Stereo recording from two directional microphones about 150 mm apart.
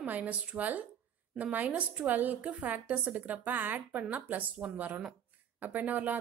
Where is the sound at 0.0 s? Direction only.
10° right (ahead or behind).